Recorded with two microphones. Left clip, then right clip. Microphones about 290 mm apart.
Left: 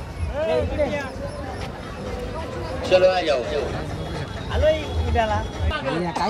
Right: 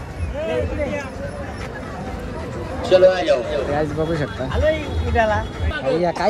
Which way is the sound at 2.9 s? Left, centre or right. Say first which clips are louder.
Right 4 dB; centre.